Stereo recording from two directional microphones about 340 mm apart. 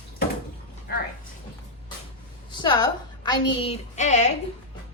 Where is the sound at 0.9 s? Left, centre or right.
Left.